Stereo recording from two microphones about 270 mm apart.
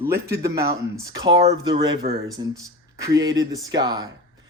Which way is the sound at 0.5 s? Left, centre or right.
Right.